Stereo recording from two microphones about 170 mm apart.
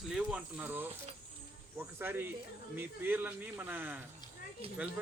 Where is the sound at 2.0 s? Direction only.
10° right (ahead or behind).